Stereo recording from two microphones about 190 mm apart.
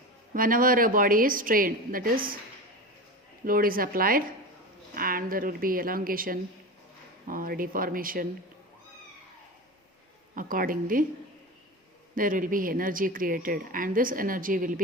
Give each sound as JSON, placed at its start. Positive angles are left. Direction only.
{"t": 0.3, "sound": "a woman's voice", "side_deg": -45}
{"t": 3.4, "sound": "a woman's voice", "side_deg": -50}
{"t": 10.3, "sound": "a woman's voice", "side_deg": -45}
{"t": 12.1, "sound": "a woman's voice", "side_deg": -45}